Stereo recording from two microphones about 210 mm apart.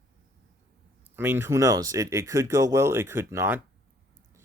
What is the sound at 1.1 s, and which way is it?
Speech, 10° right (ahead or behind).